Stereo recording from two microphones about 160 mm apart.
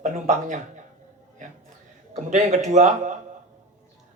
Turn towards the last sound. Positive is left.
turn(degrees=-50)  # may be behind; listen again after turning